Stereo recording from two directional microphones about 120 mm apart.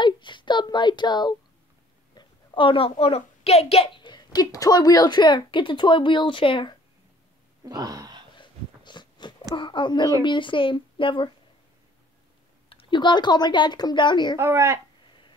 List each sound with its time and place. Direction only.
0.0 s a child's voice: 40° left (ahead or behind)
4.0 s speech: 40° left (ahead or behind)
7.6 s a sound: 30° right (ahead or behind)
8.4 s a sound: 40° left (ahead or behind)
9.6 s speech: 40° left (ahead or behind)
12.6 s speech: 45° left (ahead or behind)
14.3 s speech: 25° right (ahead or behind)